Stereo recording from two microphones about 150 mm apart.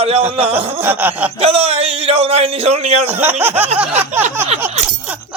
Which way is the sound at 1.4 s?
40° right (ahead or behind).